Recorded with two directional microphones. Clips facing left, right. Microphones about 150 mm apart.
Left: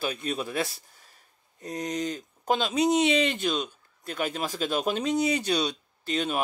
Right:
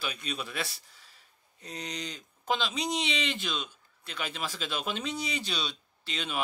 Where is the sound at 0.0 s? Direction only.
50° left (ahead or behind).